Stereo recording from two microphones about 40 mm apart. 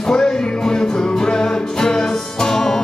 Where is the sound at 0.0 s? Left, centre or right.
Centre.